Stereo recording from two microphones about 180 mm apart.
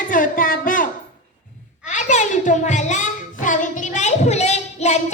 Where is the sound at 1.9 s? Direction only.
40° left (ahead or behind).